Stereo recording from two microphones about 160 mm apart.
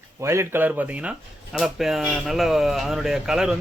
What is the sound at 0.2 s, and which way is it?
A man's voice, 15° right (ahead or behind).